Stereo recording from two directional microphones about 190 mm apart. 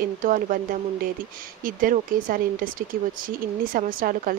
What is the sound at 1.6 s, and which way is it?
Speech, 45° right (ahead or behind).